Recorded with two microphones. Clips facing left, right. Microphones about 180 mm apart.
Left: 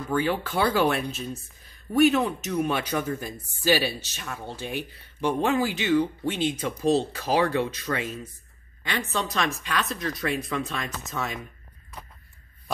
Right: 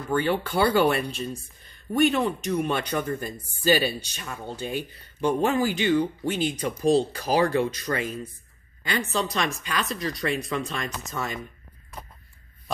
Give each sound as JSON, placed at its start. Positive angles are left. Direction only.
{"t": 0.1, "sound": "speech", "side_deg": 5}